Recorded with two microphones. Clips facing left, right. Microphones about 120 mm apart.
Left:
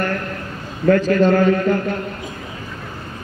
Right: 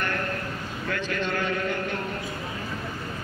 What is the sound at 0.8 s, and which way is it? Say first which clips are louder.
A man's voice: left 16 dB; 40° left (ahead or behind).